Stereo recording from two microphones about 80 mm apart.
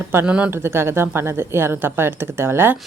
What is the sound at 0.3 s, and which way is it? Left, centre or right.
Speech, centre.